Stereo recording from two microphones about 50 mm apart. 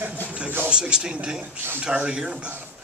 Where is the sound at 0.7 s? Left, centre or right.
Centre.